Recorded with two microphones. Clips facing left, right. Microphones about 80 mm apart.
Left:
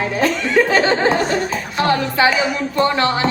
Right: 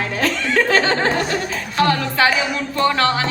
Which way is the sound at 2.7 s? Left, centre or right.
Left.